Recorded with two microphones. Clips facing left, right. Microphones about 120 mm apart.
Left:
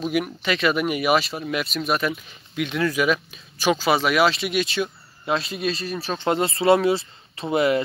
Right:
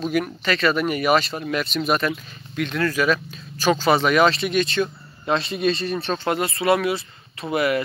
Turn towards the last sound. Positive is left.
turn(degrees=25)  # may be behind; listen again after turning